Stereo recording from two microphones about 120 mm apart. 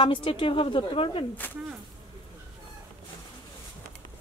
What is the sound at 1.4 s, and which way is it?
Speech, 15° left (ahead or behind).